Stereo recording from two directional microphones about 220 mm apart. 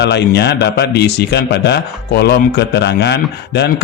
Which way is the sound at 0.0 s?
50° left (ahead or behind).